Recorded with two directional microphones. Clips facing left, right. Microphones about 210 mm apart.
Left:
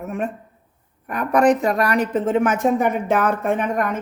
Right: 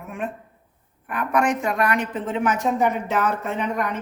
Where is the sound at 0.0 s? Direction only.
40° left (ahead or behind).